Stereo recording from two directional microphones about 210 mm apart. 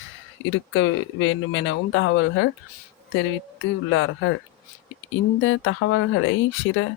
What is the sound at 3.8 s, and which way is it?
Speech, 70° left (ahead or behind).